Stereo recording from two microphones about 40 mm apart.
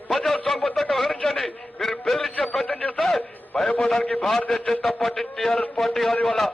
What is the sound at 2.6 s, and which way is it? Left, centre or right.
Radio, left.